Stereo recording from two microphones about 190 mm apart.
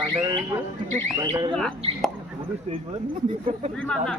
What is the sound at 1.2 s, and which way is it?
Speech, 20° right (ahead or behind).